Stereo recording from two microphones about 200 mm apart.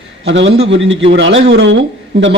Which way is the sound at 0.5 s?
30° right (ahead or behind).